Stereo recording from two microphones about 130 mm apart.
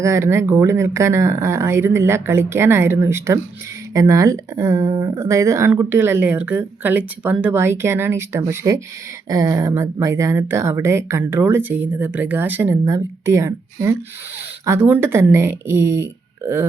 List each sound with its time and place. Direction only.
0.0 s speech: 20° right (ahead or behind)